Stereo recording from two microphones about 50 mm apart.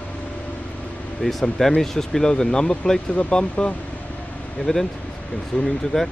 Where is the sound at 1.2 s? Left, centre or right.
Centre.